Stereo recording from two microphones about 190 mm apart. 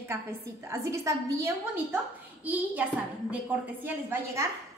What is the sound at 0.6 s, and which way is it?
A woman's voice, 15° right (ahead or behind).